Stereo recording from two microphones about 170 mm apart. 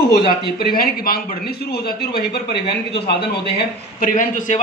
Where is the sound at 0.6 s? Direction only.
65° left (ahead or behind).